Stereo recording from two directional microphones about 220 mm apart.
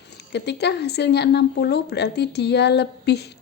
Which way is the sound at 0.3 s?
50° left (ahead or behind).